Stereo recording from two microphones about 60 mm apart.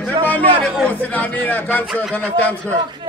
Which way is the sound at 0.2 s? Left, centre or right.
Left.